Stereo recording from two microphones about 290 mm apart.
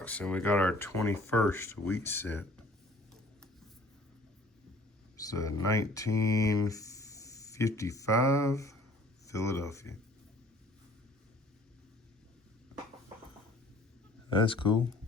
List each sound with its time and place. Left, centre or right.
0.0 s speech: centre
5.1 s speech: centre
14.4 s speech: centre